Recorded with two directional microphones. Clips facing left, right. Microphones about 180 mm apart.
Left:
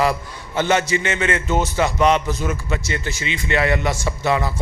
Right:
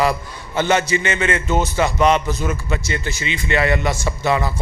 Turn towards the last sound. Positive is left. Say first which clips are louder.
# right 1 dB
turn(degrees=-30)  # may be behind; listen again after turning